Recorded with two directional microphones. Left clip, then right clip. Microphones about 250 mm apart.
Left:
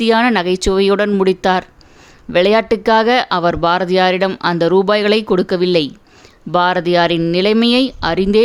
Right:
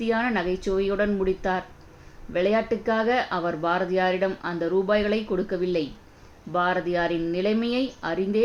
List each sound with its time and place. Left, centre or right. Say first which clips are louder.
0.0 s speech: left 12 dB; left